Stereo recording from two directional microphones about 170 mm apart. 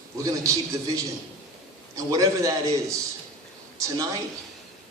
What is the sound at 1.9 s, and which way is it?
A man's voice, 20° right (ahead or behind).